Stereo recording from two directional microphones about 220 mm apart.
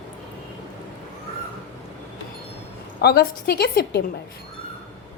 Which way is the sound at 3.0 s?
45° left (ahead or behind).